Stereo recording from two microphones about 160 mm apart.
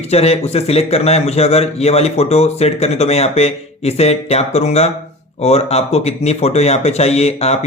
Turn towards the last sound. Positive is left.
turn(degrees=40)  # may be behind; listen again after turning